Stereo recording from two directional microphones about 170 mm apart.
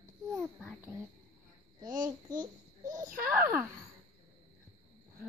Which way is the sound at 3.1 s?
10° right (ahead or behind).